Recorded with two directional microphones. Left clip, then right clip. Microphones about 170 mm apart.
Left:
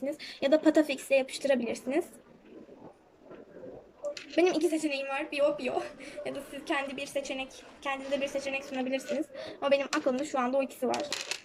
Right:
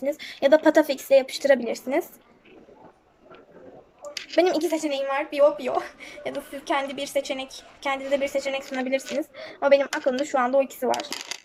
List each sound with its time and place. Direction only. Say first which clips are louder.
0.1 s speech: right 8 dB; 15° left (ahead or behind)
4.1 s speech: right 6 dB; 10° left (ahead or behind)